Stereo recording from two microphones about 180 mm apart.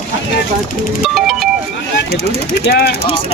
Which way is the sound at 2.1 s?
35° right (ahead or behind).